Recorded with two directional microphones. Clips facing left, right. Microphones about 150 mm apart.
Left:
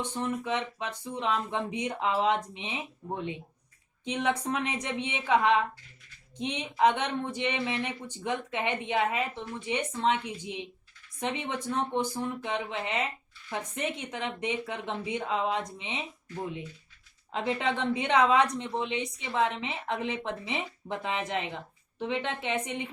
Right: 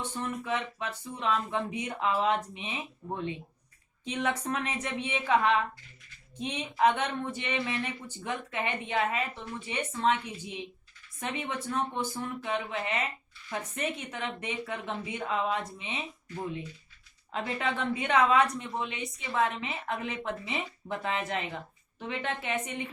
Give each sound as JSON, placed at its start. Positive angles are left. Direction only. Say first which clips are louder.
{"t": 0.2, "sound": "a woman's voice", "louder": "left 2 dB", "side_deg": 20}
{"t": 4.0, "sound": "a woman's voice", "louder": "left 2 dB", "side_deg": 15}
{"t": 17.3, "sound": "a woman's voice", "louder": "left 2 dB", "side_deg": 20}